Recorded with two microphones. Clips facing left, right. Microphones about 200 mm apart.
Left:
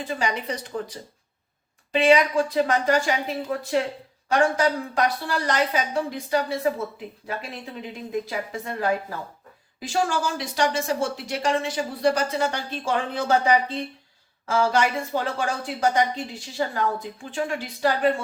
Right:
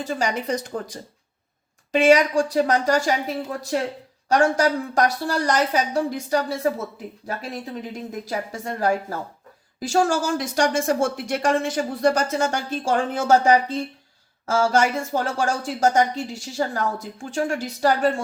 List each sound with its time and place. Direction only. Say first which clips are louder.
0.0 s a woman's voice: right 2 dB; 45° right (ahead or behind)